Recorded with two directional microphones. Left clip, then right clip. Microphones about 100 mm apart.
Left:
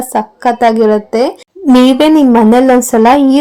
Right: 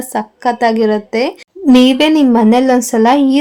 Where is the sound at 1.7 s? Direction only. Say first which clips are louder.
Left 2 dB; 35° left (ahead or behind).